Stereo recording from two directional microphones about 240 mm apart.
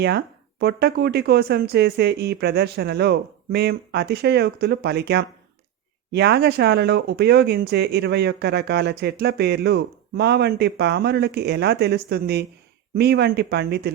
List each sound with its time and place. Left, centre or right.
0.6 s speech: right